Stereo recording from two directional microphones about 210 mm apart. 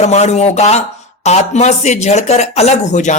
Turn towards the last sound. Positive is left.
turn(degrees=35)  # may be behind; listen again after turning